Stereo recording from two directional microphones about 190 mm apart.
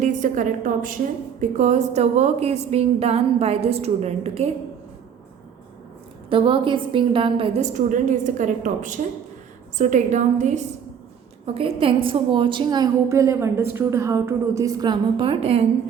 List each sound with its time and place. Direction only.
0.0 s a woman's voice: 40° right (ahead or behind)
6.3 s a woman's voice: 25° right (ahead or behind)